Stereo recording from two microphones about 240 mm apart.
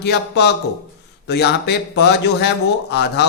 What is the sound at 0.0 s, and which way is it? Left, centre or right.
A man's voice, left.